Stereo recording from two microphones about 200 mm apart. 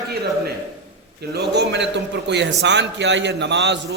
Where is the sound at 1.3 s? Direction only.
55° right (ahead or behind).